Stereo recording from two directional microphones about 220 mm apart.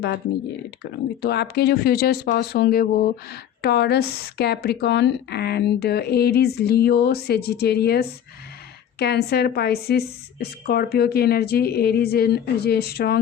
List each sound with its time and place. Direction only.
1.2 s speech: 50° left (ahead or behind)